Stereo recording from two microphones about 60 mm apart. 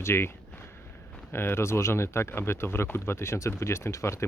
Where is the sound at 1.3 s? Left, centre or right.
Left.